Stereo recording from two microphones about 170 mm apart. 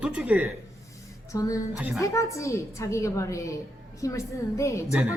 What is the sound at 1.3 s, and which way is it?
A woman's voice, 20° left (ahead or behind).